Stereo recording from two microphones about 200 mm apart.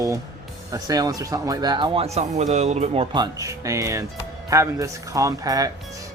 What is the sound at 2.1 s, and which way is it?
Speech, 35° right (ahead or behind).